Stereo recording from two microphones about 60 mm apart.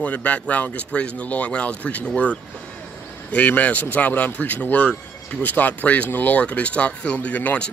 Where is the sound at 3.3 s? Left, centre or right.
Left.